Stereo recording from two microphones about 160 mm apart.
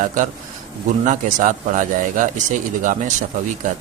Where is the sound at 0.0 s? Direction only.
55° right (ahead or behind).